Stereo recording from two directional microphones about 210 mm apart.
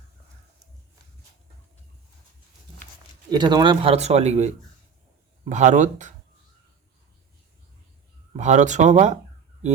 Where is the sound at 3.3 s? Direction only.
20° right (ahead or behind); by 6.1 s 35° right (ahead or behind).